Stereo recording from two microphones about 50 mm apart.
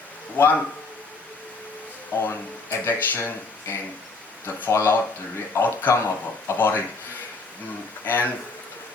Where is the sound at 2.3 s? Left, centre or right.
Left.